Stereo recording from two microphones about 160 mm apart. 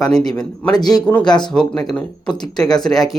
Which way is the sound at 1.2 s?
25° left (ahead or behind).